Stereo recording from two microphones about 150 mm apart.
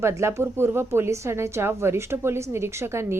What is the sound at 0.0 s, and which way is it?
A woman's voice, 20° right (ahead or behind).